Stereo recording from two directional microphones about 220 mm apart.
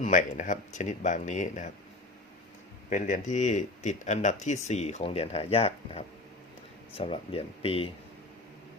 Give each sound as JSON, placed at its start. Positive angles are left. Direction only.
{"t": 0.0, "sound": "speech", "side_deg": 35}
{"t": 2.9, "sound": "speech", "side_deg": 35}